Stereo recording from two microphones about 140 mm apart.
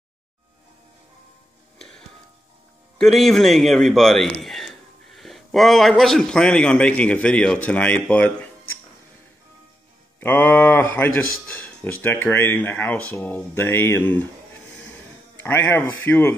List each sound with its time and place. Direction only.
1.8 s music: 5° left (ahead or behind)
3.0 s a man's voice: centre (ahead or behind)
10.2 s speech: 10° left (ahead or behind)
15.4 s speech: 15° left (ahead or behind)